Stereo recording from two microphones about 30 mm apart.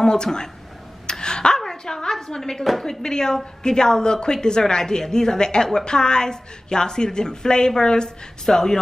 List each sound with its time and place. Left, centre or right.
0.0 s a woman's voice: left
1.0 s a sound: left
2.5 s speech: centre
3.0 s a woman's voice: left